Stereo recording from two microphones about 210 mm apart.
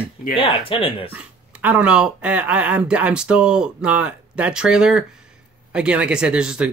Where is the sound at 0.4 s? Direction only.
25° left (ahead or behind).